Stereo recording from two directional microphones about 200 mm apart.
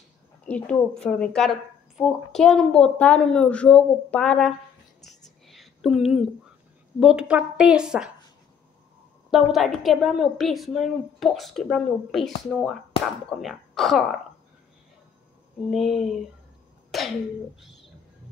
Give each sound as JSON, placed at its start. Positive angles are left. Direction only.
{"t": 0.5, "sound": "a woman's voice", "side_deg": 5}
{"t": 5.0, "sound": "whispering", "side_deg": 0}
{"t": 5.5, "sound": "a sound", "side_deg": 0}
{"t": 7.0, "sound": "a woman's voice", "side_deg": -5}
{"t": 9.3, "sound": "a woman's voice", "side_deg": 0}
{"t": 15.7, "sound": "a woman's voice", "side_deg": 0}